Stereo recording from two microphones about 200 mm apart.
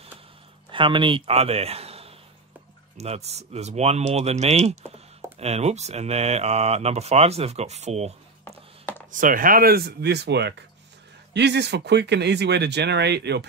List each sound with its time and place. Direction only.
0.7 s speech: 25° right (ahead or behind)
8.5 s chopping: 10° left (ahead or behind)
9.1 s speech: 45° right (ahead or behind)